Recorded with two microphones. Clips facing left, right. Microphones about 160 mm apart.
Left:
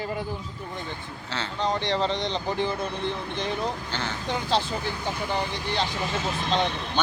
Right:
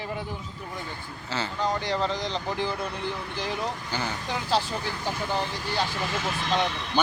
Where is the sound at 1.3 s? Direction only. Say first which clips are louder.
Even; 5° right (ahead or behind).